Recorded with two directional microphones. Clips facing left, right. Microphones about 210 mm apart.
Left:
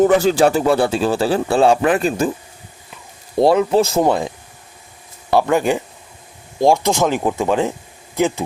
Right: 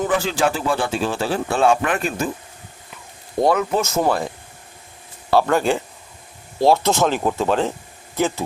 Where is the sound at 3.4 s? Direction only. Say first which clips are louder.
Left 5 dB; 30° left (ahead or behind).